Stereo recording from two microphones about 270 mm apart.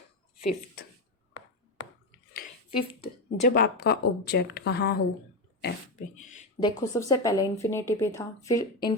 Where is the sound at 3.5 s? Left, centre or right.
Left.